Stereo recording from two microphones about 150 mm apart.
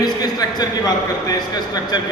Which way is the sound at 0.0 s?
25° left (ahead or behind).